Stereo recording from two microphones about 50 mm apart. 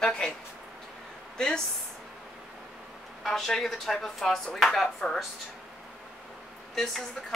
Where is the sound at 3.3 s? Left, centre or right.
Centre.